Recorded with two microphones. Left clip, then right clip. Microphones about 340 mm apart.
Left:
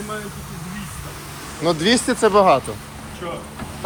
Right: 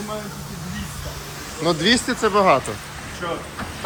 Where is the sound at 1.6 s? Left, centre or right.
Centre.